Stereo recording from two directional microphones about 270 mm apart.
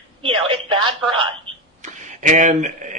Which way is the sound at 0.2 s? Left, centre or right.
Centre.